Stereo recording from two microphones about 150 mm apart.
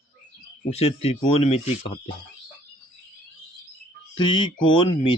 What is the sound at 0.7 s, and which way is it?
Speech, 45° left (ahead or behind).